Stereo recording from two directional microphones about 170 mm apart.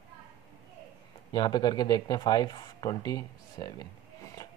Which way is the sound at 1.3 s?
25° left (ahead or behind).